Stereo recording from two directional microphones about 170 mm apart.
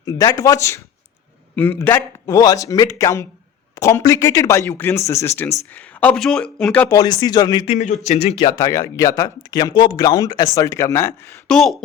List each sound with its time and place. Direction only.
0.0 s speech: 20° left (ahead or behind); by 6.8 s 5° left (ahead or behind)
6.8 s speech: 20° left (ahead or behind)
7.6 s speech: 40° left (ahead or behind)
8.4 s speech: 20° left (ahead or behind)
11.4 s speech: 5° left (ahead or behind)